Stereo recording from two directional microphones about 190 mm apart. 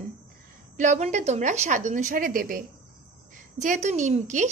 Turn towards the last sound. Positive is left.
turn(degrees=-40)  # may be behind; listen again after turning